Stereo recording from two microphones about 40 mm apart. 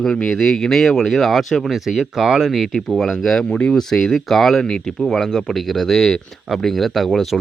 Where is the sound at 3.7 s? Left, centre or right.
Centre.